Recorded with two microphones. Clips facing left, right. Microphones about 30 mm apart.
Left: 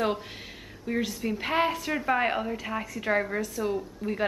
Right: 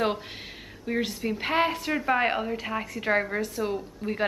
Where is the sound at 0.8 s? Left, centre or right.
Centre.